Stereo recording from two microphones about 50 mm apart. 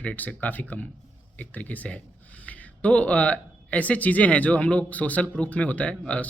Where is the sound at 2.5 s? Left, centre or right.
Left.